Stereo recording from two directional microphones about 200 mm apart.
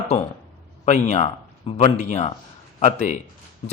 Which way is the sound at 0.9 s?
35° left (ahead or behind).